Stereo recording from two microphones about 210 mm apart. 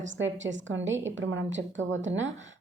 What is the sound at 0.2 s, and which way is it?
A woman's voice, 65° right (ahead or behind).